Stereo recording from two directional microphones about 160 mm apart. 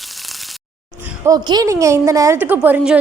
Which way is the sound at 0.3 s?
Centre (ahead or behind).